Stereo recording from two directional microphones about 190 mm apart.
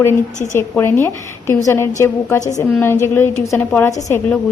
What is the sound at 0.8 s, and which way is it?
A woman's voice, 10° left (ahead or behind).